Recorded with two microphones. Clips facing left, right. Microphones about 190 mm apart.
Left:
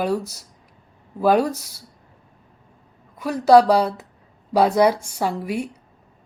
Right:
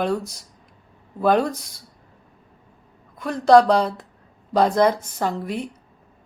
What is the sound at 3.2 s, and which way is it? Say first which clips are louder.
A woman's voice: left 1 dB; 10° left (ahead or behind).